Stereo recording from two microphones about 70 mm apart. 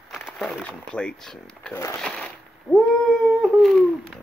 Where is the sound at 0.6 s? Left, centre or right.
Centre.